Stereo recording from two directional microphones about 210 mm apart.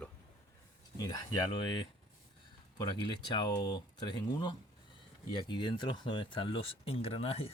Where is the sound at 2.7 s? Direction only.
20° left (ahead or behind).